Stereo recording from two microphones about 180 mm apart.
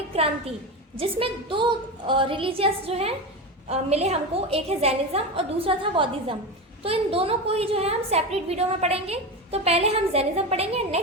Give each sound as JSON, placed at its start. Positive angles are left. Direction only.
{"t": 0.9, "sound": "a woman's voice", "side_deg": -30}